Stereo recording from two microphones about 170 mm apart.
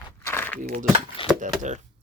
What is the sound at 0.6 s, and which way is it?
Speech, 50° right (ahead or behind).